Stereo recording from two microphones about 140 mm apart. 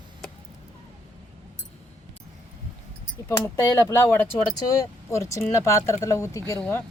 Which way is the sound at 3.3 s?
20° left (ahead or behind).